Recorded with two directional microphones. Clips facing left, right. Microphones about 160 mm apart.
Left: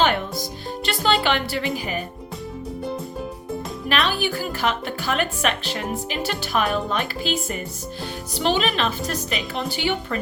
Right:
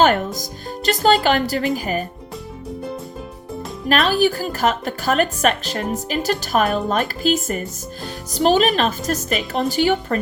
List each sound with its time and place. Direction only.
0.0 s music: 45° right (ahead or behind)
0.9 s speech: 40° right (ahead or behind)
3.8 s speech: 40° right (ahead or behind)